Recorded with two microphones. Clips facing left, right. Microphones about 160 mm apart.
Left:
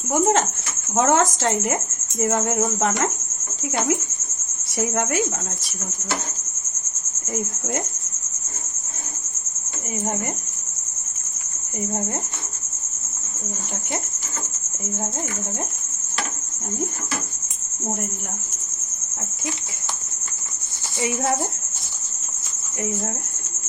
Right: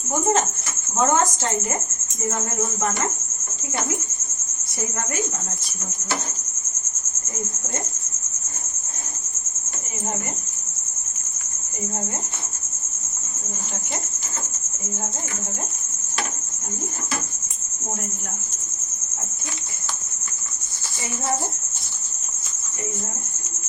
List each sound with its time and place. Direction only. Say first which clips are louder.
0.9 s speech: left 2 dB; 80° left
4.8 s speech: left 6 dB; 75° left (ahead or behind)